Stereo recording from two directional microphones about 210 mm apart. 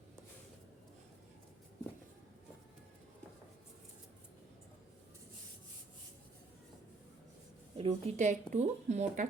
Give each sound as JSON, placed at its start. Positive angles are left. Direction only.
{"t": 7.8, "sound": "speech", "side_deg": -30}